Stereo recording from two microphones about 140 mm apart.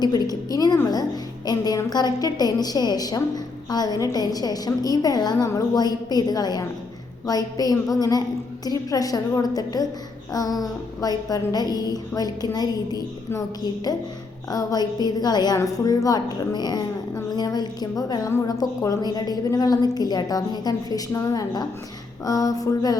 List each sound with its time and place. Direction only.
0.0 s a woman's voice: 30° left (ahead or behind)